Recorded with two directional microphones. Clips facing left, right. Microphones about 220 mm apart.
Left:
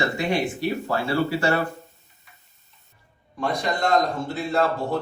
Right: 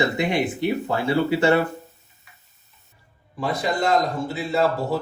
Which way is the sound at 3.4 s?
5° right (ahead or behind).